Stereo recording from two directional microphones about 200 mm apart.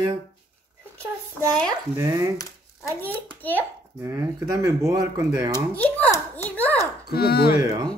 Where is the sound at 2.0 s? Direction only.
15° right (ahead or behind).